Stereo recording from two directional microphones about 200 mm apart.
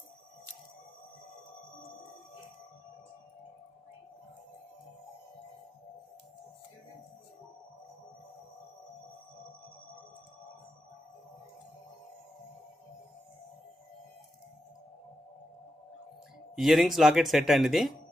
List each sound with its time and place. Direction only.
16.6 s speech: centre (ahead or behind)